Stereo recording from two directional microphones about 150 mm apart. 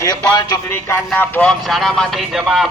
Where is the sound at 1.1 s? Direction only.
10° left (ahead or behind).